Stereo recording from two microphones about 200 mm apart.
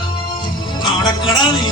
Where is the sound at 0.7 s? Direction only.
20° left (ahead or behind).